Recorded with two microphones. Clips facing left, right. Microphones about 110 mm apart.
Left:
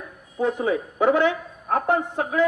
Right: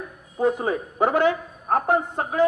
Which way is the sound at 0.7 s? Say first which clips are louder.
Left 2 dB; 40° right (ahead or behind).